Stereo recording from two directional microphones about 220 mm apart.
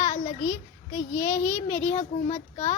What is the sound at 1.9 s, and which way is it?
Speech, 30° left (ahead or behind).